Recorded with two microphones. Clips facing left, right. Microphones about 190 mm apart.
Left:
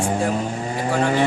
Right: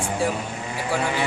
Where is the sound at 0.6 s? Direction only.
40° left (ahead or behind).